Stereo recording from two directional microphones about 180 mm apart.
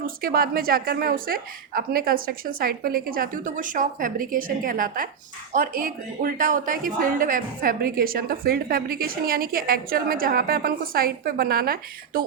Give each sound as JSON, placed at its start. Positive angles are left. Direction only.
{"t": 0.0, "sound": "a woman's voice", "side_deg": -55}